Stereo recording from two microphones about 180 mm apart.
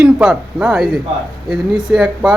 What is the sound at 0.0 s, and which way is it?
Speech, 5° right (ahead or behind).